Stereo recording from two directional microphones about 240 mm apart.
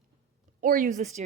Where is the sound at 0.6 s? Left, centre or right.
Right.